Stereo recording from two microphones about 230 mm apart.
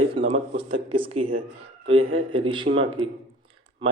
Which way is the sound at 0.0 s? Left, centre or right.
Right.